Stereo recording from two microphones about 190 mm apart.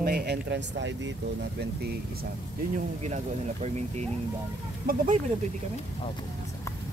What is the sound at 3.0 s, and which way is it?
Speech, 35° right (ahead or behind).